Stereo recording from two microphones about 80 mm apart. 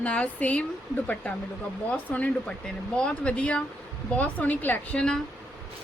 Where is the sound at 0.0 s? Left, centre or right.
Centre.